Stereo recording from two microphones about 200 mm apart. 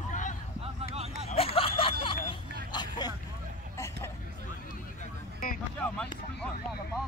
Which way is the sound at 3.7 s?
15° left (ahead or behind).